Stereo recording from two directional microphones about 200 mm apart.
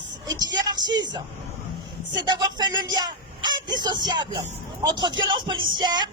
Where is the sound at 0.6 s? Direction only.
20° right (ahead or behind).